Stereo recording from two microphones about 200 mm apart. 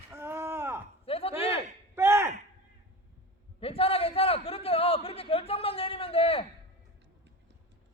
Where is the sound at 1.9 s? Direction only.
10° right (ahead or behind).